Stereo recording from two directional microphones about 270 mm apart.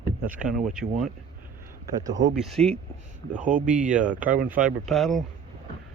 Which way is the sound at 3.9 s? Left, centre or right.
Centre.